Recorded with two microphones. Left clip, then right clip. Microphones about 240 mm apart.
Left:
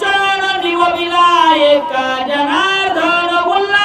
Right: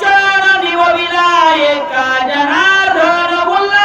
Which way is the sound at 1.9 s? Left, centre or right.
Centre.